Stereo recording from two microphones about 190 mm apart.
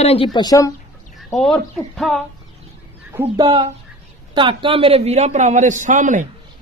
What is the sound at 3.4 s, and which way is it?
A man's voice, 25° right (ahead or behind).